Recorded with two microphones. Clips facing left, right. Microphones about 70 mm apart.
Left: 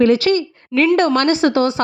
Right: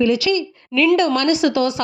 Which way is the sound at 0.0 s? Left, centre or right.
Left.